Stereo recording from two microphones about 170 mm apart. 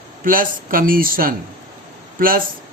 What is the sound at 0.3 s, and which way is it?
A man's voice, 55° right (ahead or behind).